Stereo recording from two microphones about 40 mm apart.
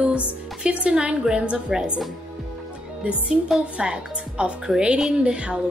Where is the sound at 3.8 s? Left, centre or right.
Right.